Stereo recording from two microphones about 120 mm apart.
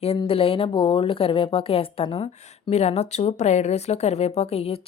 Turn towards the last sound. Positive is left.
turn(degrees=55)  # may be behind; listen again after turning